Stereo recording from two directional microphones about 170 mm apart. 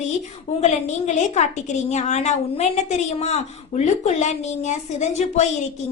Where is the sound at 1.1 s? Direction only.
45° left (ahead or behind).